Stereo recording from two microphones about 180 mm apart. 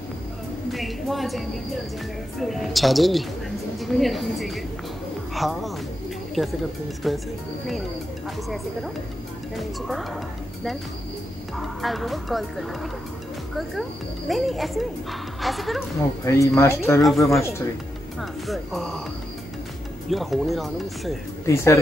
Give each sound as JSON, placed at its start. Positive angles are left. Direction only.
{"t": 0.7, "sound": "a woman's voice", "side_deg": 0}
{"t": 2.4, "sound": "a woman's voice", "side_deg": 0}
{"t": 9.6, "sound": "a woman's voice", "side_deg": 0}
{"t": 11.5, "sound": "a woman's voice", "side_deg": 0}
{"t": 16.3, "sound": "speech", "side_deg": 15}
{"t": 18.5, "sound": "a woman's voice", "side_deg": 0}
{"t": 20.1, "sound": "a woman's voice", "side_deg": 0}